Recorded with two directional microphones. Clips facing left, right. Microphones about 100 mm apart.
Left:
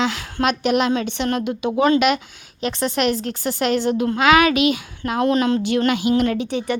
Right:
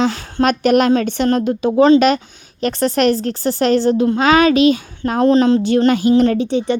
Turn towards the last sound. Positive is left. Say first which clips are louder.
# right 5 dB
turn(degrees=-30)  # may be behind; listen again after turning